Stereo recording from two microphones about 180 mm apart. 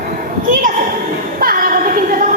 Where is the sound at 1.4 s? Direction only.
50° right (ahead or behind).